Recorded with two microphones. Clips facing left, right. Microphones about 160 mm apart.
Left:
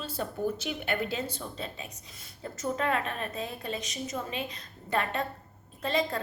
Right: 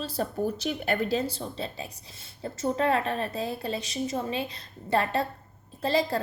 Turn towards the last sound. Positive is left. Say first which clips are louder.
# right 4 dB
turn(degrees=-35)  # may be behind; listen again after turning